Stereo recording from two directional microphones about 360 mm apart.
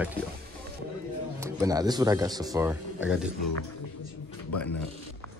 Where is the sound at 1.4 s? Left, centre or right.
Centre.